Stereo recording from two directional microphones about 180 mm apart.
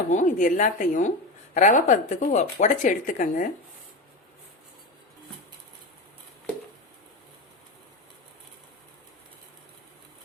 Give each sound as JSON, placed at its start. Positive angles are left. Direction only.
{"t": 0.1, "sound": "speech", "side_deg": 45}